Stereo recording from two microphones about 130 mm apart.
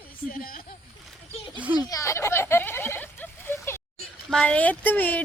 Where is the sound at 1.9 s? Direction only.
25° left (ahead or behind).